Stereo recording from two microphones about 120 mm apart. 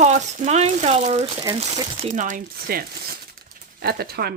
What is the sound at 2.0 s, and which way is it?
Speech, 90° right.